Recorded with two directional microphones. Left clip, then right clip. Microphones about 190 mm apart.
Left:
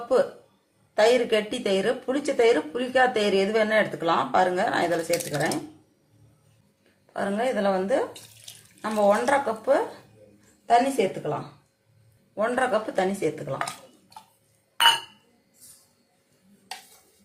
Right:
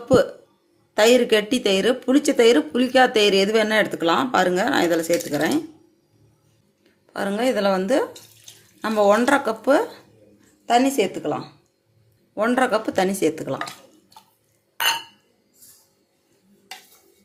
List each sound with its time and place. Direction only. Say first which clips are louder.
0.9 s speech: right 4 dB; 55° right (ahead or behind)
7.1 s speech: right 4 dB; 55° right (ahead or behind)